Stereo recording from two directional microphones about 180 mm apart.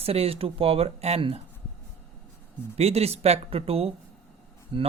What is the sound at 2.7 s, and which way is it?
Speech, 35° right (ahead or behind).